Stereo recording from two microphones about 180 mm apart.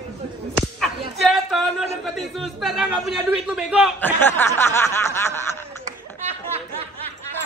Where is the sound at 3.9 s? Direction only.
10° left (ahead or behind).